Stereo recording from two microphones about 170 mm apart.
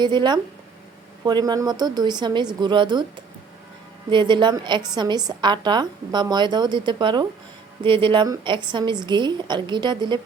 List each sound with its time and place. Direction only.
0.0 s a woman's voice: 25° right (ahead or behind)